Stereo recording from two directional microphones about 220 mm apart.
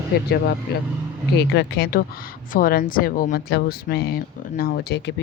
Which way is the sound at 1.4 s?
50° left (ahead or behind).